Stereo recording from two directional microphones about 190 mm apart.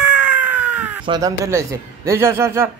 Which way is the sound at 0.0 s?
5° right (ahead or behind).